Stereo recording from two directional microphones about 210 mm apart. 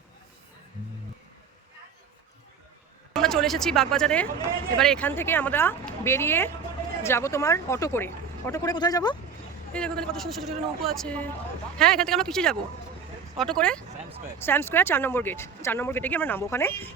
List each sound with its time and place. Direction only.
3.1 s a woman's voice: centre (ahead or behind); by 9.1 s 20° left (ahead or behind)
9.7 s a man's voice: 5° left (ahead or behind)